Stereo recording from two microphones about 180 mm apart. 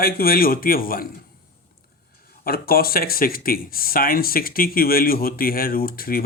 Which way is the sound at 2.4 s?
55° left (ahead or behind).